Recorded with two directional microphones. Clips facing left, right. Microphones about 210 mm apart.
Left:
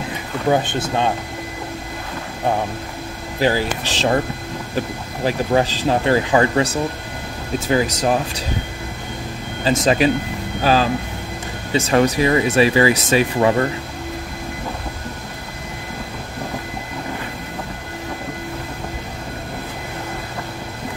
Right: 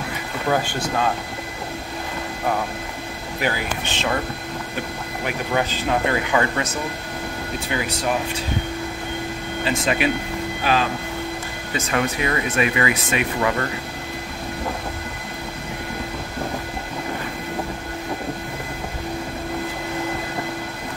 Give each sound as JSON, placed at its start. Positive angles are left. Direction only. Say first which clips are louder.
{"t": 0.5, "sound": "speech", "louder": "left 4 dB", "side_deg": 20}
{"t": 3.3, "sound": "speech", "louder": "left 6 dB", "side_deg": 30}
{"t": 5.2, "sound": "speech", "louder": "left 6 dB", "side_deg": 30}
{"t": 9.7, "sound": "speech", "louder": "left 6 dB", "side_deg": 35}